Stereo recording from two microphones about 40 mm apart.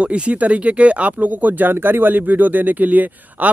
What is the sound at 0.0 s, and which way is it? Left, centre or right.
Speech, right.